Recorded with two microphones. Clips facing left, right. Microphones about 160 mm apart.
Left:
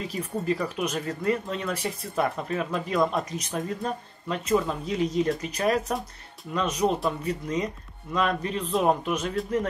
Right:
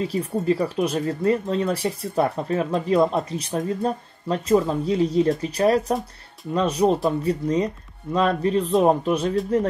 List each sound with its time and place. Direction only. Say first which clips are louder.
0.0 s speech: right 6 dB; 35° right (ahead or behind)